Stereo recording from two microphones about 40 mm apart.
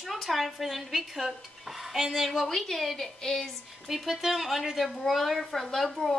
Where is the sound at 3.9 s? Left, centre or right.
Centre.